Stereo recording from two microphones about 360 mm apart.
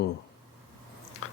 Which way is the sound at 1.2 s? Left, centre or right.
Left.